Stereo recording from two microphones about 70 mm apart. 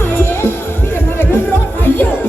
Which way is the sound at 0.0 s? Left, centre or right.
Left.